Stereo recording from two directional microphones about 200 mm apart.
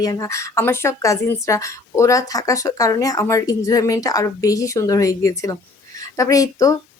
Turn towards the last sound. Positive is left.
turn(degrees=15)  # may be behind; listen again after turning